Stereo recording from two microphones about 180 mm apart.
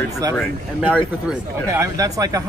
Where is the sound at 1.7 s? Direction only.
15° right (ahead or behind).